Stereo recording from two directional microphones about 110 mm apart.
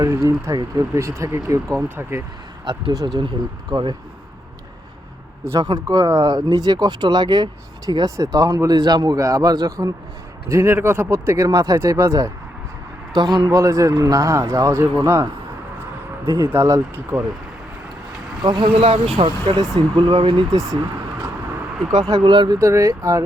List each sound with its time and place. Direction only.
0.0 s speech: 25° right (ahead or behind)
2.6 s speech: 40° right (ahead or behind)
5.5 s speech: 35° right (ahead or behind)
11.4 s speech: 30° right (ahead or behind)
13.1 s speech: 40° right (ahead or behind)
18.4 s speech: 45° right (ahead or behind)
21.8 s speech: centre (ahead or behind)
22.2 s speech: 50° right (ahead or behind)
22.5 s speech: 30° right (ahead or behind)